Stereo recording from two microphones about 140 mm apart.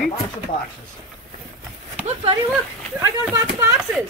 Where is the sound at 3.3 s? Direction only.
20° right (ahead or behind).